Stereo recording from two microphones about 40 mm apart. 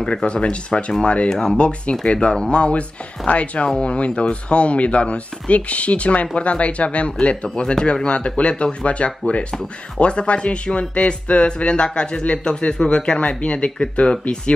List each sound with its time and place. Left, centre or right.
0.0 s speech: centre
1.3 s speech: centre
1.6 s speech: left